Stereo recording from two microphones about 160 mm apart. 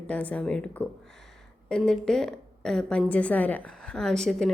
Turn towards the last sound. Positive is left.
turn(degrees=0)  # may be behind; listen again after turning